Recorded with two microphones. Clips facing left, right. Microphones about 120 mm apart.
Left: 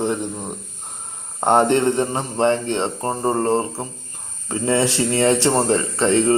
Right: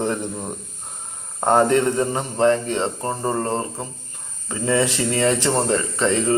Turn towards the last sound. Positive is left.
turn(degrees=30)  # may be behind; listen again after turning